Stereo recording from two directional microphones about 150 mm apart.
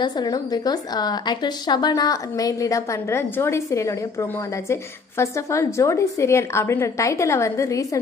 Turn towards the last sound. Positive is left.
turn(degrees=20)  # may be behind; listen again after turning